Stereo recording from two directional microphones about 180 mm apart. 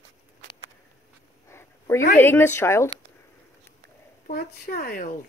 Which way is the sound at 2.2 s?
10° left (ahead or behind).